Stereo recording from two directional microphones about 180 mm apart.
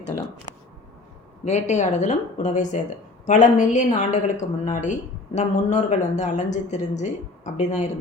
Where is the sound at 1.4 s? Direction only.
40° left (ahead or behind).